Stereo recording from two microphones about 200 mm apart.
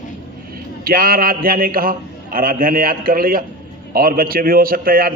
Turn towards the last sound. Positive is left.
turn(degrees=-45)  # may be behind; listen again after turning